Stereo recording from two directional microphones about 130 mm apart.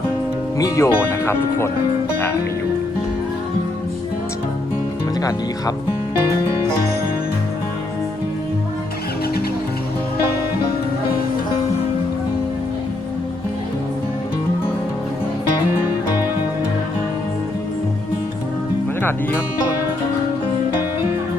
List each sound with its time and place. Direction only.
0.6 s speech: 20° left (ahead or behind)